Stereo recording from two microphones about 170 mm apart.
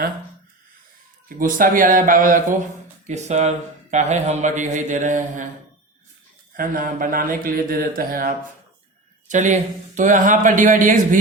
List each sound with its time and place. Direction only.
1.4 s speech: 55° right (ahead or behind)
6.6 s speech: 55° right (ahead or behind)
9.2 s speech: 45° right (ahead or behind)